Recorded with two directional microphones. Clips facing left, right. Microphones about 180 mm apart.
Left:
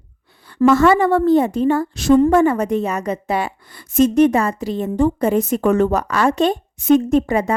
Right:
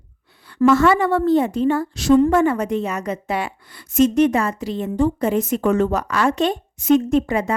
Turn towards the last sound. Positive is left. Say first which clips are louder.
# left 2 dB
turn(degrees=40)  # may be behind; listen again after turning